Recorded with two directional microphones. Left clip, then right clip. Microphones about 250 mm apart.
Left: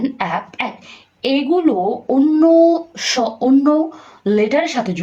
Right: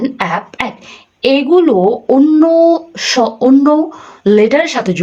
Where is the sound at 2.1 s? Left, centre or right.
Centre.